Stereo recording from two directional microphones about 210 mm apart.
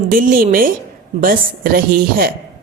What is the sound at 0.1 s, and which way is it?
A woman's voice, 40° right (ahead or behind).